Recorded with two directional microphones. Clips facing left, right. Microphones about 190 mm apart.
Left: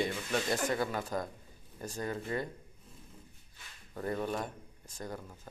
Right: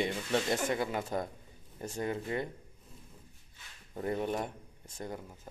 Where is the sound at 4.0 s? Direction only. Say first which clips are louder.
Right 2 dB; 20° right (ahead or behind).